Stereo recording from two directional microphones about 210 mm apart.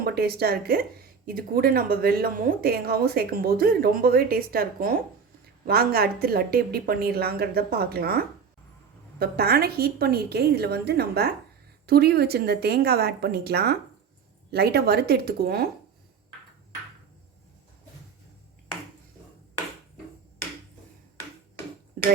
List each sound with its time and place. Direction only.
0.0 s speech: 45° right (ahead or behind)